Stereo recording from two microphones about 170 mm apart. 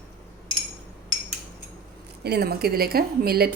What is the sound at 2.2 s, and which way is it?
Speech, 70° right (ahead or behind).